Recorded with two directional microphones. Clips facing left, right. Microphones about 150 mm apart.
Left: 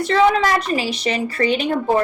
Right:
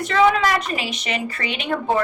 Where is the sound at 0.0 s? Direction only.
35° left (ahead or behind).